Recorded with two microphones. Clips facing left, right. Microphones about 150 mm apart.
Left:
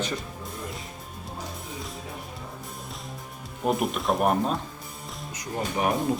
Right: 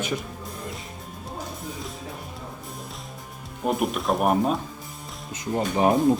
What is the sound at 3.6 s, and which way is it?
Speech, centre (ahead or behind).